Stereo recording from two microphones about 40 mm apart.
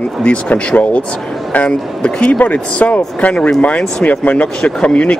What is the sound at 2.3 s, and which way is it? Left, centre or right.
Speech, left.